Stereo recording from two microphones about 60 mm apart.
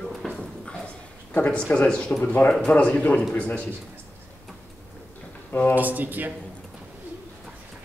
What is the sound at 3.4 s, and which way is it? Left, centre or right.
Speech, left.